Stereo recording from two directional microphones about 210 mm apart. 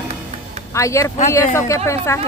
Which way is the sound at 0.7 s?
15° left (ahead or behind).